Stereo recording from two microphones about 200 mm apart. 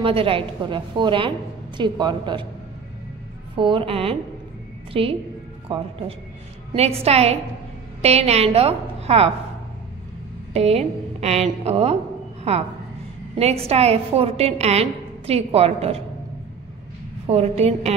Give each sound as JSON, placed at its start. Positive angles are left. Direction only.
{"t": 0.0, "sound": "a woman's voice", "side_deg": -25}
{"t": 3.5, "sound": "a woman's voice", "side_deg": -25}
{"t": 10.5, "sound": "a woman's voice", "side_deg": -30}
{"t": 13.4, "sound": "a woman's voice", "side_deg": -30}
{"t": 17.3, "sound": "a woman's voice", "side_deg": -30}